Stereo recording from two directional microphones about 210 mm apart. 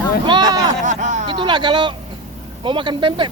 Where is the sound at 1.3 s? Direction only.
20° right (ahead or behind).